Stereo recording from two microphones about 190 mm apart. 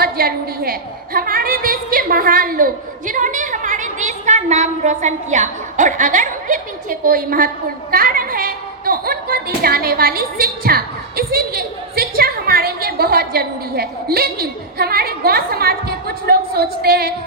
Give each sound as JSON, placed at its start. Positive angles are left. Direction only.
{"t": 0.0, "sound": "a woman's voice", "side_deg": -50}